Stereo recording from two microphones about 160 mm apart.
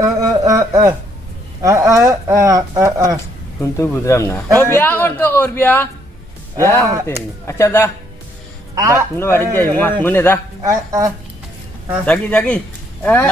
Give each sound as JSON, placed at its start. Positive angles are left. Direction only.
{"t": 0.0, "sound": "a sound", "side_deg": -20}
{"t": 1.6, "sound": "speech", "side_deg": -20}
{"t": 3.7, "sound": "a man's voice", "side_deg": 20}
{"t": 8.7, "sound": "a man's voice", "side_deg": -20}
{"t": 9.1, "sound": "a man's voice", "side_deg": 15}
{"t": 10.6, "sound": "speech", "side_deg": -20}
{"t": 12.1, "sound": "speech", "side_deg": 10}